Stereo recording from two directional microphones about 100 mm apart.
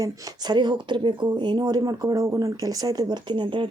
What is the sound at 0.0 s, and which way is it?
Speech, 45° right (ahead or behind).